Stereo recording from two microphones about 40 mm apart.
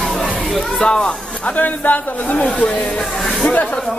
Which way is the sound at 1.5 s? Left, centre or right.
Left.